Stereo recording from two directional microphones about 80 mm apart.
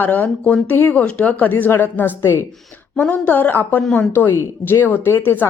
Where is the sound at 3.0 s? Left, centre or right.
Centre.